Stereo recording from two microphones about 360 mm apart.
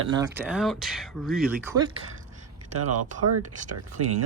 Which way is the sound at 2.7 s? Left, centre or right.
Right.